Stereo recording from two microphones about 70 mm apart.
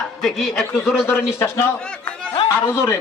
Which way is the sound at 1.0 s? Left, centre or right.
Left.